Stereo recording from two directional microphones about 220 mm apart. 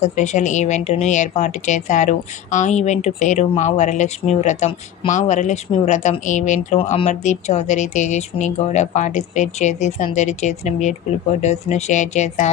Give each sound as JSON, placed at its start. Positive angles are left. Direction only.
{"t": 0.0, "sound": "speech", "side_deg": 30}